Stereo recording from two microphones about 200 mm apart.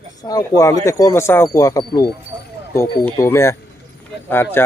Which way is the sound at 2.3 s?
25° right (ahead or behind).